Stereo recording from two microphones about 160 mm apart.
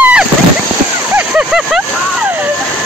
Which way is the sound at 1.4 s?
5° right (ahead or behind).